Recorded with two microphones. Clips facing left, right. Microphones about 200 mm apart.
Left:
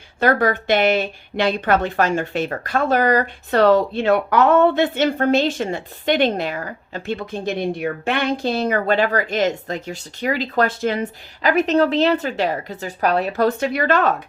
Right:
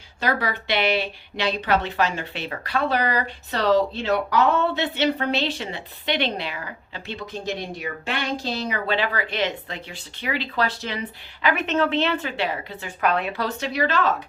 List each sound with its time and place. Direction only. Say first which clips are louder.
0.2 s a woman's voice: left 8 dB; 50° left (ahead or behind)